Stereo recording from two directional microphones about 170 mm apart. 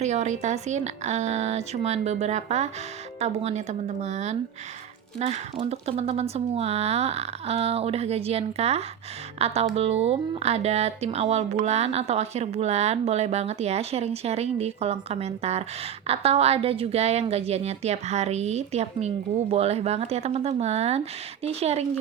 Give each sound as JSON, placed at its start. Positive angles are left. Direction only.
{"t": 0.0, "sound": "a woman's voice", "side_deg": -40}